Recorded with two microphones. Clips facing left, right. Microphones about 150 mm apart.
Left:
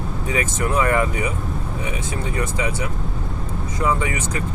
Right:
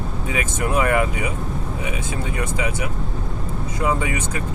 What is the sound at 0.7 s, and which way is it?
Speech, 15° right (ahead or behind).